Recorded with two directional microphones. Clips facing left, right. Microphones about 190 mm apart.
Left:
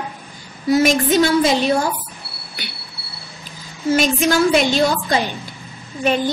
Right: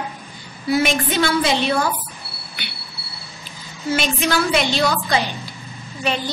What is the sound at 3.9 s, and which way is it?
A woman's voice, 45° left (ahead or behind).